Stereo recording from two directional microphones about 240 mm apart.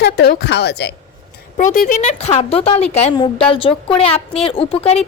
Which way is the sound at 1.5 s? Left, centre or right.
Left.